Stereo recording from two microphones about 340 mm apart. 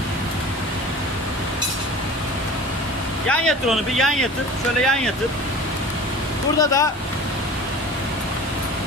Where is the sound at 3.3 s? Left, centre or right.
Centre.